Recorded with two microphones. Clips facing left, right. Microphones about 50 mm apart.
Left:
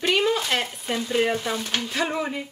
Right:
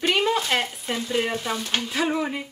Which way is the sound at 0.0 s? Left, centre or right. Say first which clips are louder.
Even; centre.